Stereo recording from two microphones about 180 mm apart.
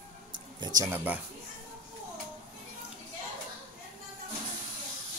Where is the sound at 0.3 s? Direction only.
25° right (ahead or behind).